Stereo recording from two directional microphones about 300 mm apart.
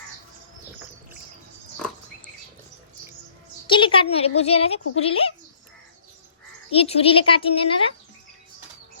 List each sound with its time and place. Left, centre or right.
3.7 s a woman's voice: centre
6.7 s a woman's voice: centre